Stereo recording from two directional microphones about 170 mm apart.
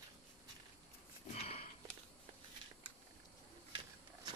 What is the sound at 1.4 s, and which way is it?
Sniff, 35° left (ahead or behind).